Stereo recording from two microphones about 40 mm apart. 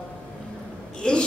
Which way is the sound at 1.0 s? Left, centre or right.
Left.